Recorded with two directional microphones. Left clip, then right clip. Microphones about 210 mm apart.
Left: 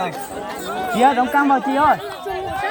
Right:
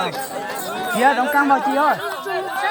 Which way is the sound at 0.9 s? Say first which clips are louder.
Left 1 dB; 40° left (ahead or behind).